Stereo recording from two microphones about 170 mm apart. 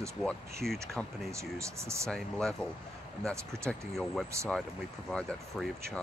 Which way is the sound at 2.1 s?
5° left (ahead or behind).